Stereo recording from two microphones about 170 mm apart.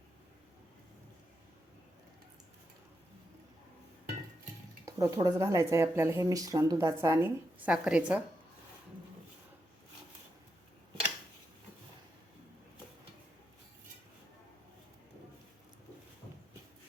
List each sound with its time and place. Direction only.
4.9 s speech: 20° right (ahead or behind)